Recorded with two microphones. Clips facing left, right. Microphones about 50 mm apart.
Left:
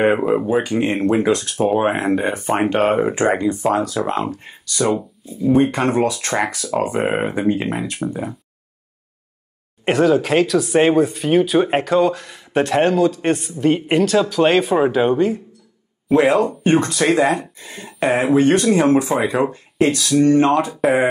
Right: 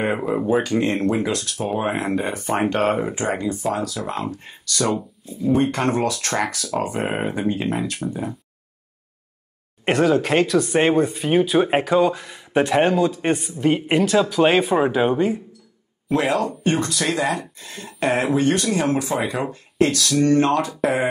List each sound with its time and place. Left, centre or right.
0.2 s speech: centre
1.2 s speech: left
2.5 s speech: centre
3.3 s speech: left
4.6 s speech: centre
7.4 s speech: left
8.1 s speech: centre
9.8 s speech: centre
16.3 s speech: left
17.6 s a sound: centre
18.3 s speech: left